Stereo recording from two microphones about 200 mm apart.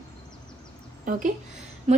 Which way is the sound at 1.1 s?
40° right (ahead or behind).